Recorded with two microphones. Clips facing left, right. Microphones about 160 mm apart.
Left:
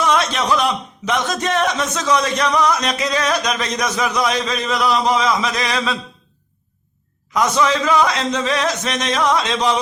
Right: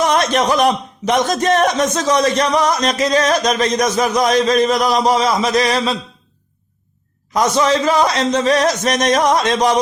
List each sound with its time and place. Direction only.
0.0 s a man's voice: 45° right (ahead or behind)
7.3 s a man's voice: 40° right (ahead or behind)